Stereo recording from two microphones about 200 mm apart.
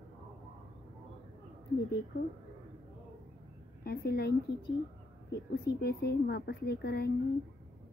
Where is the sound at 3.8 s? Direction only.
50° left (ahead or behind).